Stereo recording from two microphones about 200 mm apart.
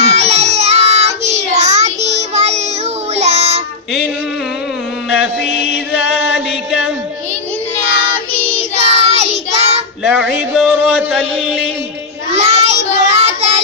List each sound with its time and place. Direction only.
0.0 s child singing: 35° right (ahead or behind)
6.3 s a sound: 5° right (ahead or behind)
8.7 s child singing: 30° right (ahead or behind)
10.0 s music: 5° right (ahead or behind)
12.3 s child singing: 30° right (ahead or behind)